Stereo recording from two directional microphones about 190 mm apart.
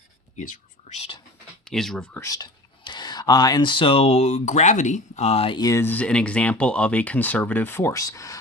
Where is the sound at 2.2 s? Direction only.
20° left (ahead or behind).